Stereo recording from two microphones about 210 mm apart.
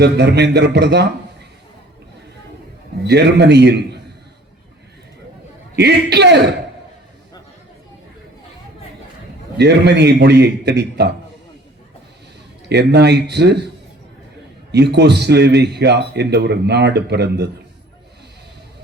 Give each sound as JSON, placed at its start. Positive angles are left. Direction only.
{"t": 0.0, "sound": "a man's voice", "side_deg": -55}
{"t": 3.1, "sound": "a man's voice", "side_deg": -55}
{"t": 5.7, "sound": "a man's voice", "side_deg": -50}
{"t": 9.6, "sound": "a man's voice", "side_deg": -55}
{"t": 12.6, "sound": "a man's voice", "side_deg": -55}
{"t": 14.7, "sound": "a man's voice", "side_deg": -55}